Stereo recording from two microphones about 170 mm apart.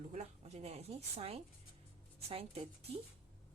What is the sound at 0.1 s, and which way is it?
Speech, 40° right (ahead or behind).